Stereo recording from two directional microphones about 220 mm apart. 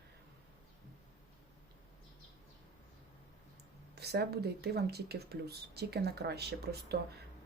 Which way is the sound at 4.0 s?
45° right (ahead or behind).